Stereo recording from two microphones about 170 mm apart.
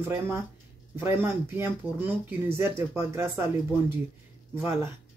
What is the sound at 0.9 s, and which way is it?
Speech, 15° right (ahead or behind).